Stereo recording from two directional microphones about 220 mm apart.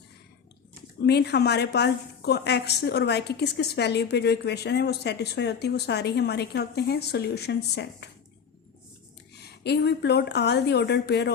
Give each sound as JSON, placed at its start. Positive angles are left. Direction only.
{"t": 1.0, "sound": "a woman's voice", "side_deg": 50}
{"t": 9.6, "sound": "a woman's voice", "side_deg": 50}